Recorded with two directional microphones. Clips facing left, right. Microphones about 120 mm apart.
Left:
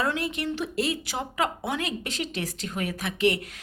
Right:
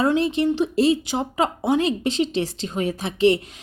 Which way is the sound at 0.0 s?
25° right (ahead or behind).